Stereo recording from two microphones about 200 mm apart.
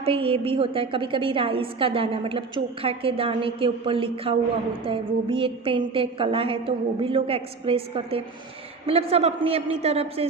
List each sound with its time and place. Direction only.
0.0 s a woman's voice: 30° right (ahead or behind)